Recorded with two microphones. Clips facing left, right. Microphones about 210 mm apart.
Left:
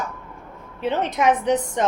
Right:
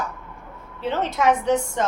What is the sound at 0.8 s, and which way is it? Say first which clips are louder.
A woman's voice: left 1 dB; 15° left (ahead or behind).